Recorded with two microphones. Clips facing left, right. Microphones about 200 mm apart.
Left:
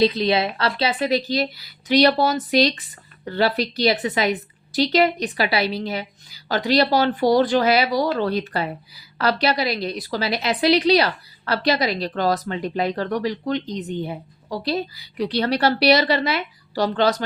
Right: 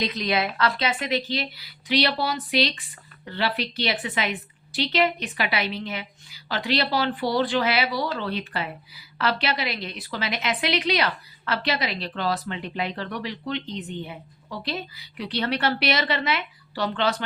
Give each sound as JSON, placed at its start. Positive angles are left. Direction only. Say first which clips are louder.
{"t": 0.0, "sound": "a woman's voice", "louder": "left 7 dB", "side_deg": 30}